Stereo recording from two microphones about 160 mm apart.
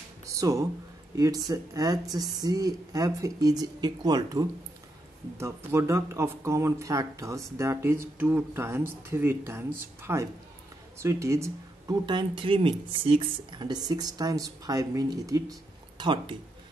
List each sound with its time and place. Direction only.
0.3 s speech: 20° right (ahead or behind)